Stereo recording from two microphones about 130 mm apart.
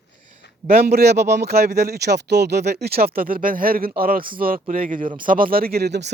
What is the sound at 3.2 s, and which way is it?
Speech, 90° right.